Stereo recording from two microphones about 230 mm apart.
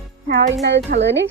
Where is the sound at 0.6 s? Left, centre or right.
Right.